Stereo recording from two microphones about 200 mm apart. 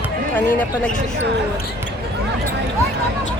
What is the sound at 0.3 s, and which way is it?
Speech, 10° left (ahead or behind).